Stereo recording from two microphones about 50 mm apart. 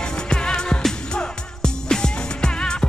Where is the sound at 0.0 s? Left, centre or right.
Centre.